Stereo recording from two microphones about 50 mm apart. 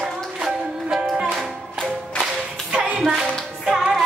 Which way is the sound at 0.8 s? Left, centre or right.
Centre.